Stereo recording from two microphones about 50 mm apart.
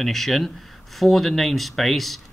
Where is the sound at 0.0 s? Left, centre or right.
Centre.